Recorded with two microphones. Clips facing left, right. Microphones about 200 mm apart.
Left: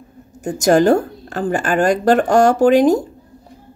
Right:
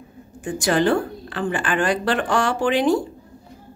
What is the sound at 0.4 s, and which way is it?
A woman's voice, 40° left (ahead or behind).